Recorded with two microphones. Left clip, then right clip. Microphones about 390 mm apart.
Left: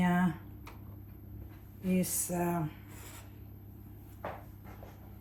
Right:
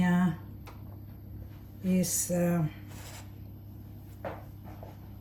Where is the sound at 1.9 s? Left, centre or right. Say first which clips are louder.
Right 4 dB; centre.